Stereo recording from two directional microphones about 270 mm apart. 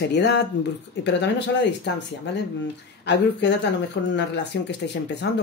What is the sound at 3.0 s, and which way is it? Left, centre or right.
Speech, left.